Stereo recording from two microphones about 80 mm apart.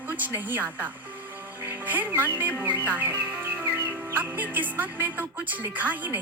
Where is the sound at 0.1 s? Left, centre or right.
Right.